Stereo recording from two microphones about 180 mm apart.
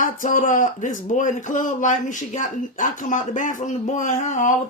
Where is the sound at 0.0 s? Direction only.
45° left (ahead or behind).